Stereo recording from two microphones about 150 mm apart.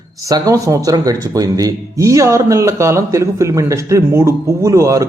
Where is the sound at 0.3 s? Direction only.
20° right (ahead or behind).